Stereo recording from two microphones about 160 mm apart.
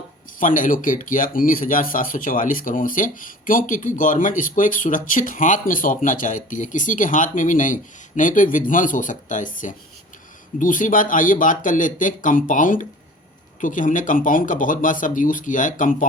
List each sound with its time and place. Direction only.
0.3 s speech: 55° left (ahead or behind)